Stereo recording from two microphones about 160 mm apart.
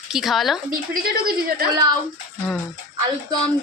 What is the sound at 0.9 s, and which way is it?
Speech, 70° right (ahead or behind).